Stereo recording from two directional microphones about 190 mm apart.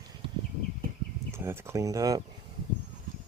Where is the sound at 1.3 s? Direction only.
15° right (ahead or behind).